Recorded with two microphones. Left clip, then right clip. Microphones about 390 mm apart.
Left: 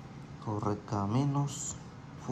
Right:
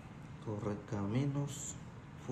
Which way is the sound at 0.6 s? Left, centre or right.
Centre.